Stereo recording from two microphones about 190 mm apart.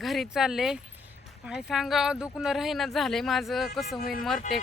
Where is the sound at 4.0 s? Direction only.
50° left (ahead or behind).